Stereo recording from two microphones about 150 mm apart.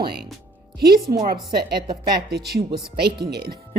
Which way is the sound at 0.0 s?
90° right.